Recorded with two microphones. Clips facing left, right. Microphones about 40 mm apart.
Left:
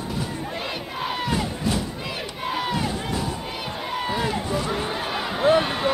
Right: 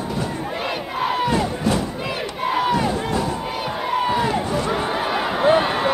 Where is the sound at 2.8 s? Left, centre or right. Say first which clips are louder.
Right 5 dB; centre.